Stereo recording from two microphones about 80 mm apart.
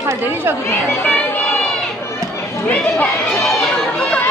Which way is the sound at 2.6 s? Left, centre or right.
Centre.